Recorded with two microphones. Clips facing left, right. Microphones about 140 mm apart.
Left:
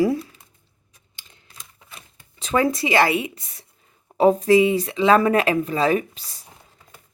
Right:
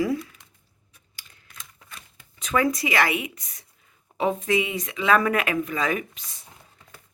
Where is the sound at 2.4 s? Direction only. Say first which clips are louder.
Left 3 dB; 30° left (ahead or behind).